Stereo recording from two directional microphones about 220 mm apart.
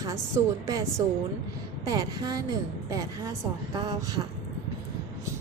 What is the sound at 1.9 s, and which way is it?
A woman's voice, 15° right (ahead or behind).